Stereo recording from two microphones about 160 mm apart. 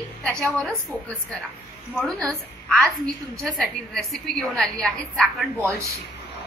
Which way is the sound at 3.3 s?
5° left (ahead or behind).